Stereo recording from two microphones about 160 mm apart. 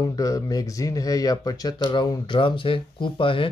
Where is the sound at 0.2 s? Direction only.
20° left (ahead or behind).